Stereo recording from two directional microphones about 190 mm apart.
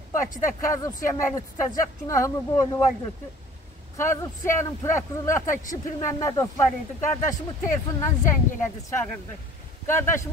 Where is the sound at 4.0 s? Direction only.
15° left (ahead or behind).